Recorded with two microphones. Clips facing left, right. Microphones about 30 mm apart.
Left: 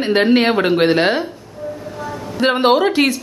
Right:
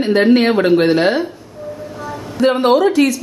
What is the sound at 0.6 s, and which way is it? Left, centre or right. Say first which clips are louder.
Speech: right 2 dB; left.